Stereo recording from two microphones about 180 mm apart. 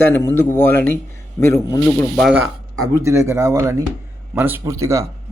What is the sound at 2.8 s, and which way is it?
Speech, 15° right (ahead or behind).